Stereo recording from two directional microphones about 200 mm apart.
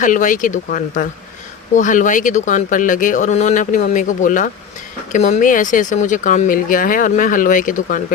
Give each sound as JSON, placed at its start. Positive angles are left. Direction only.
{"t": 0.0, "sound": "speech", "side_deg": 40}